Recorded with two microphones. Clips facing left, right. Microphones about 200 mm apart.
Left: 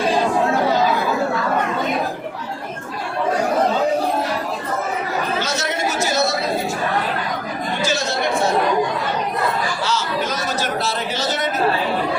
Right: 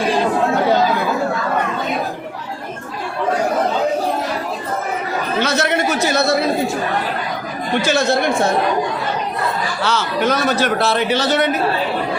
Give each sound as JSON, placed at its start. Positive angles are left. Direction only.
{"t": 5.4, "sound": "chatter", "side_deg": -60}
{"t": 7.8, "sound": "chatter", "side_deg": -60}
{"t": 9.8, "sound": "a sound", "side_deg": -60}